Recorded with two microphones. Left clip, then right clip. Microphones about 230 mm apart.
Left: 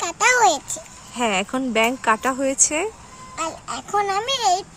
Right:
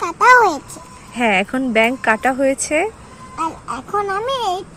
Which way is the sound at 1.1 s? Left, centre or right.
Centre.